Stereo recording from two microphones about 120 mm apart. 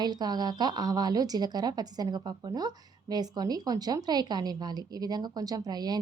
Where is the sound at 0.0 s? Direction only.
35° right (ahead or behind).